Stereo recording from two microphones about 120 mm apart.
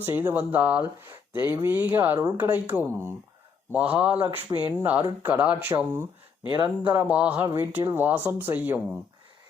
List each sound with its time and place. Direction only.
0.0 s speech: 15° right (ahead or behind)
6.5 s speech: 35° right (ahead or behind)
7.1 s speech: 10° right (ahead or behind)